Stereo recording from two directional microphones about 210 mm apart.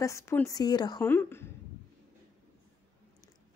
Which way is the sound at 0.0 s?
15° left (ahead or behind).